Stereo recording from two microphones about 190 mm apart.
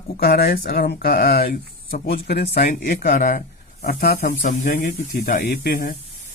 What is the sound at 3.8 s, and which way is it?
Speech, 55° left (ahead or behind).